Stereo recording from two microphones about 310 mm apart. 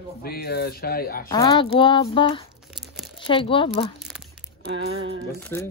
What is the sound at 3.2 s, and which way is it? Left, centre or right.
Speech, centre.